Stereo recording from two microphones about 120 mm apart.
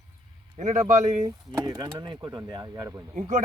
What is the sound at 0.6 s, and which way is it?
Speech, 90° right.